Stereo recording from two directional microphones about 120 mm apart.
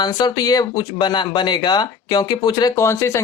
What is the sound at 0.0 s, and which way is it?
Speech, 35° left (ahead or behind).